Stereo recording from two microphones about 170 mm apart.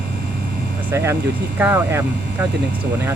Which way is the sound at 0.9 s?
15° right (ahead or behind).